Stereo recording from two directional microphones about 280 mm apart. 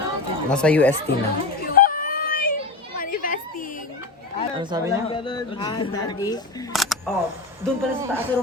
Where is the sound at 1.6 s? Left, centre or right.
Left.